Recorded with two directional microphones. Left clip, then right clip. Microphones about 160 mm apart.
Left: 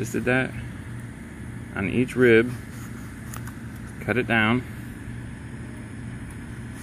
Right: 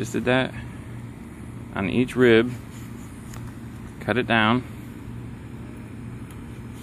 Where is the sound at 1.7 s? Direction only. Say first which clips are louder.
Right 1 dB; 15° right (ahead or behind).